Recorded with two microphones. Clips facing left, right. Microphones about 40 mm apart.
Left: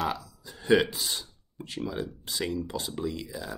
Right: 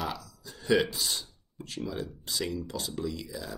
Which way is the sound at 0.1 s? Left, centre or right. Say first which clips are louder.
Left 4 dB; left.